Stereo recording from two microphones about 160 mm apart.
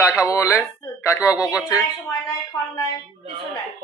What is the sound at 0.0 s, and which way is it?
A man's voice, 15° left (ahead or behind).